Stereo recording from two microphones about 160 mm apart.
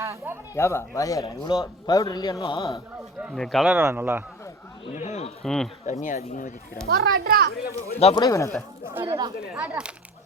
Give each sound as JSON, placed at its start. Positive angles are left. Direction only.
{"t": 0.0, "sound": "speech", "side_deg": -20}
{"t": 0.5, "sound": "speech", "side_deg": 15}
{"t": 2.6, "sound": "a man's voice", "side_deg": -5}
{"t": 3.8, "sound": "speech", "side_deg": -15}
{"t": 4.9, "sound": "speech", "side_deg": 45}
{"t": 5.4, "sound": "speech", "side_deg": 5}
{"t": 5.8, "sound": "speech", "side_deg": 50}
{"t": 6.8, "sound": "a child's voice", "side_deg": -80}
{"t": 7.9, "sound": "speech", "side_deg": 40}
{"t": 8.2, "sound": "speech", "side_deg": 20}
{"t": 9.0, "sound": "speech", "side_deg": -20}
{"t": 9.5, "sound": "speech", "side_deg": -10}